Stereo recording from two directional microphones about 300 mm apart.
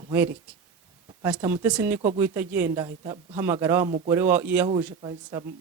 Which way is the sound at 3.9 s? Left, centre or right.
Centre.